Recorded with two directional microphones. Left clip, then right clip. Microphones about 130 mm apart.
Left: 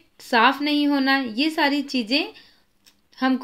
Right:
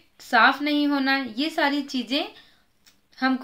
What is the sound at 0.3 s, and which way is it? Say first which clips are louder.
A woman's voice: even; 25° left (ahead or behind).